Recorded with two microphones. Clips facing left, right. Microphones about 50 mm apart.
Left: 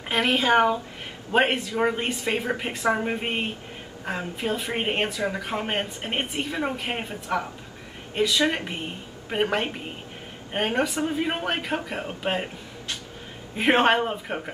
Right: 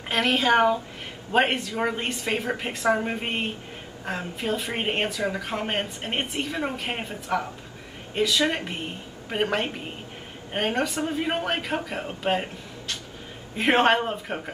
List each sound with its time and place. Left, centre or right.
0.1 s a woman's voice: centre